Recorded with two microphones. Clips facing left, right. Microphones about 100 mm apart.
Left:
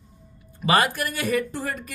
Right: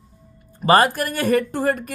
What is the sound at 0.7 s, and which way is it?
Speech, 40° right (ahead or behind).